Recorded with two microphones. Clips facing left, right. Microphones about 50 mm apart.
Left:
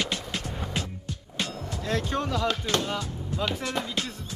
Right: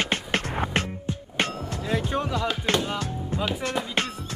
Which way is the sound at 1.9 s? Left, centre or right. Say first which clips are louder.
Right 1 dB; centre.